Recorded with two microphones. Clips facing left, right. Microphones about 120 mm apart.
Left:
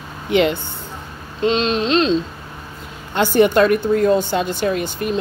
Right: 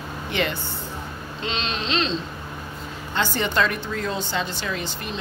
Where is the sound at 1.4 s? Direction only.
50° left (ahead or behind).